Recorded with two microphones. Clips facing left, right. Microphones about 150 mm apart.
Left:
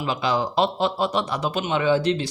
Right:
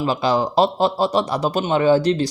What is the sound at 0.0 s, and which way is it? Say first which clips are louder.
A man's voice: right 4 dB; 35° right (ahead or behind).